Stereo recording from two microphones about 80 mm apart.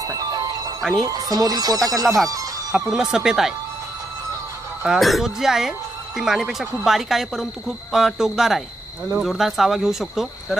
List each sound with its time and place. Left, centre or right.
0.0 s music: right
1.0 s speech: right
2.7 s speech: centre
4.8 s speech: centre